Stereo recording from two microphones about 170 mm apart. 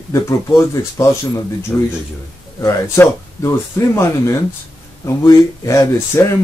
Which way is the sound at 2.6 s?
15° left (ahead or behind).